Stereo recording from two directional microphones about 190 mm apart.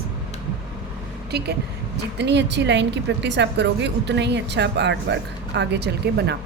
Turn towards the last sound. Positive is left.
turn(degrees=-60)  # may be behind; listen again after turning